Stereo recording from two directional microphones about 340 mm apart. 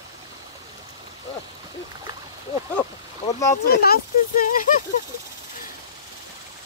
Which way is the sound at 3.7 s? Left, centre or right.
Left.